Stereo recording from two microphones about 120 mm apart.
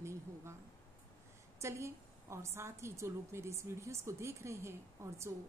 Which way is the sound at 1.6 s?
25° right (ahead or behind).